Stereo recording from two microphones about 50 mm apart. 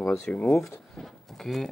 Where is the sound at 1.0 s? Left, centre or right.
Centre.